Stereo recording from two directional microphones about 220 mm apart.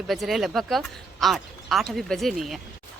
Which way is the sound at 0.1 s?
Centre (ahead or behind).